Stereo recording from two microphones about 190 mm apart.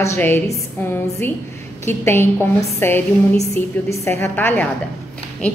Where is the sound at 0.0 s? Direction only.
15° left (ahead or behind).